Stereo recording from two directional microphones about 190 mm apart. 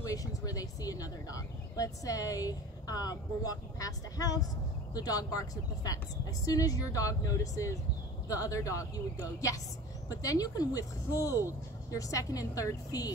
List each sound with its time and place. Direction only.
0.0 s speech: 20° left (ahead or behind)